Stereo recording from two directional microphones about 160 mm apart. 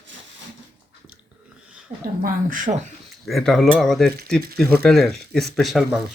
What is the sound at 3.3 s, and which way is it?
Speech, centre (ahead or behind).